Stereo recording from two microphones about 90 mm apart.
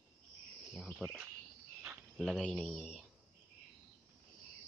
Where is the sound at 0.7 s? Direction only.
5° left (ahead or behind).